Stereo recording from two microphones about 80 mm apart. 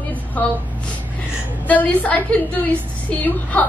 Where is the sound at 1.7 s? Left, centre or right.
Centre.